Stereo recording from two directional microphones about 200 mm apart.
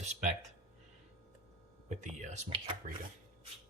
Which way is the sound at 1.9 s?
35° right (ahead or behind).